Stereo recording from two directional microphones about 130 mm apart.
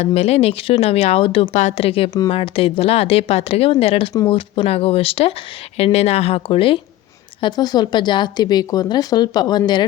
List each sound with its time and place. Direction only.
0.0 s speech: 55° left (ahead or behind); by 9.8 s 35° left (ahead or behind)